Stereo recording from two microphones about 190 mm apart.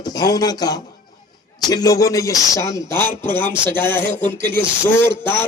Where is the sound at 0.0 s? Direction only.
20° left (ahead or behind).